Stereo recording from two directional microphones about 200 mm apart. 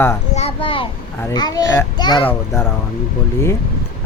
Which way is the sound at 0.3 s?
30° left (ahead or behind).